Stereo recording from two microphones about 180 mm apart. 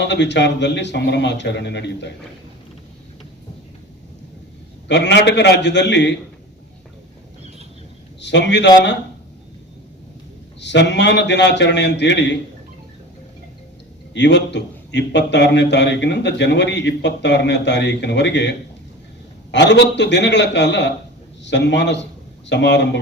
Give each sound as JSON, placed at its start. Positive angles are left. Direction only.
{"t": 0.0, "sound": "a man's voice", "side_deg": 75}
{"t": 4.9, "sound": "a man's voice", "side_deg": 75}
{"t": 8.2, "sound": "a man's voice", "side_deg": 75}
{"t": 10.6, "sound": "a man's voice", "side_deg": 75}
{"t": 14.1, "sound": "a man's voice", "side_deg": 75}